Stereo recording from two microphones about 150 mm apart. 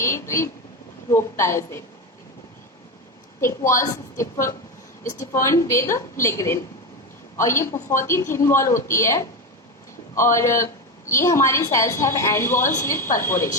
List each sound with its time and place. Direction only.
0.0 s a woman's voice: 20° left (ahead or behind)
3.8 s a woman's voice: 20° left (ahead or behind)